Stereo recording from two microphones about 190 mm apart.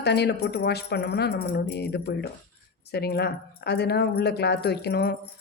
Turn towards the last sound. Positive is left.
turn(degrees=55)  # may be behind; listen again after turning